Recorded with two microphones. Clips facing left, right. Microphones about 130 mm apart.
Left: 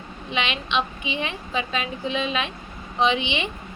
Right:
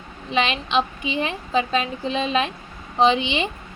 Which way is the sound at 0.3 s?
35° right (ahead or behind).